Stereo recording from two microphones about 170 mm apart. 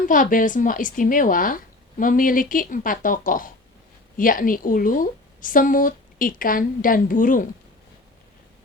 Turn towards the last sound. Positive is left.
turn(degrees=50)  # may be behind; listen again after turning